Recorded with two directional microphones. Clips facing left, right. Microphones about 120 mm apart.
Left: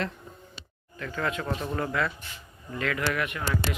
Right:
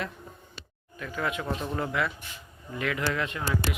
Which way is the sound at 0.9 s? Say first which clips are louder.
Left 1 dB; 10° right (ahead or behind).